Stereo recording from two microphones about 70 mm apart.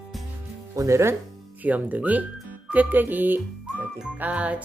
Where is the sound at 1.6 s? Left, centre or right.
Right.